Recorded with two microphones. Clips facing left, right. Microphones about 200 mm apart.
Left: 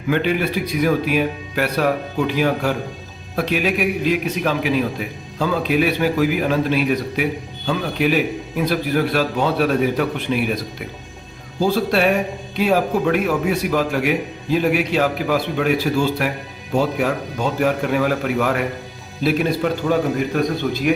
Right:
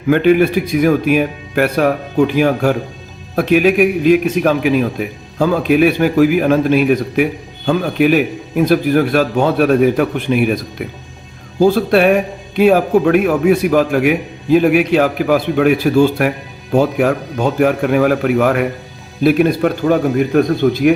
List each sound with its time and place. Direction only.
0.1 s a man's voice: 50° right (ahead or behind)
11.6 s a man's voice: 55° right (ahead or behind)